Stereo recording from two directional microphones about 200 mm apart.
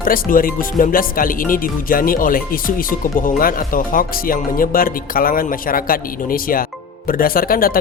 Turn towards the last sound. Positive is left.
turn(degrees=45)  # may be behind; listen again after turning